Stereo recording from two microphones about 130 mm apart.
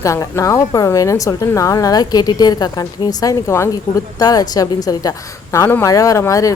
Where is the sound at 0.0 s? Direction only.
25° left (ahead or behind).